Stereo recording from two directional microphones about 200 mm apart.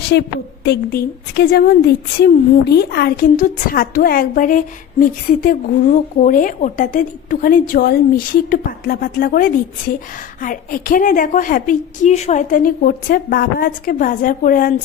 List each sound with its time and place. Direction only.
0.1 s a woman's voice: 55° left (ahead or behind)